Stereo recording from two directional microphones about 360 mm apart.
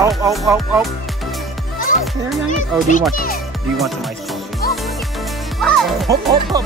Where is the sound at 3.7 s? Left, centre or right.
Centre.